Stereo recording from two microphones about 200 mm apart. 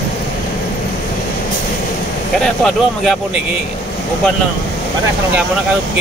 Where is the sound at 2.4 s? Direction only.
Centre (ahead or behind).